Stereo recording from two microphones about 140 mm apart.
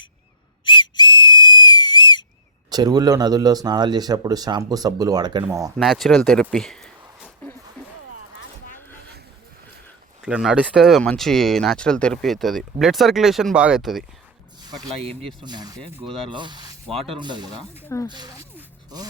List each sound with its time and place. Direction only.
0.6 s whistle: 35° left (ahead or behind)
2.6 s speech: 30° right (ahead or behind)
5.7 s speech: centre (ahead or behind)
10.2 s speech: 5° right (ahead or behind)
14.6 s a sound: 30° right (ahead or behind)
15.4 s speech: 30° right (ahead or behind)
16.0 s speech: 45° right (ahead or behind)
16.8 s speech: centre (ahead or behind)
17.1 s speech: 35° right (ahead or behind)
17.8 s speech: 15° left (ahead or behind)
18.1 s speech: 30° right (ahead or behind)